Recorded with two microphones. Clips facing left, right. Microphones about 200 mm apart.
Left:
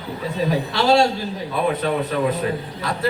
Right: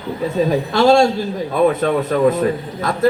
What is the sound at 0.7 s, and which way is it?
A man's voice, 45° right (ahead or behind).